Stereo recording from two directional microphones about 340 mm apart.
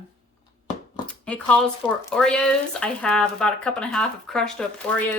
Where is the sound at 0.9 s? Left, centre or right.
Centre.